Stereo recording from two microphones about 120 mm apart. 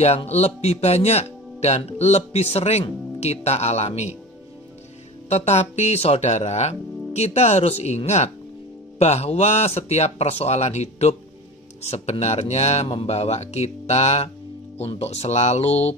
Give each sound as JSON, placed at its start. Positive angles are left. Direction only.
{"t": 0.0, "sound": "speech", "side_deg": 60}
{"t": 5.3, "sound": "speech", "side_deg": 65}